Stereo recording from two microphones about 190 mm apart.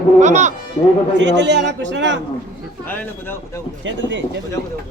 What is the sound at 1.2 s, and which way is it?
Speech, 65° right (ahead or behind).